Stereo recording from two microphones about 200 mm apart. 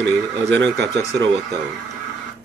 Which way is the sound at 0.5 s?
60° right (ahead or behind).